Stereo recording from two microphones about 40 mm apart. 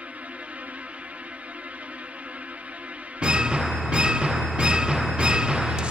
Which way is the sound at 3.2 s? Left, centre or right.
Right.